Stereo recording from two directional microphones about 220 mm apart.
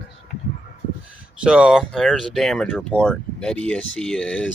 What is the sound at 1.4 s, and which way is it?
Speech, 5° right (ahead or behind).